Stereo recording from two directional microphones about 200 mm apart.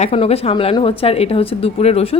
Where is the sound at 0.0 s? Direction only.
30° left (ahead or behind).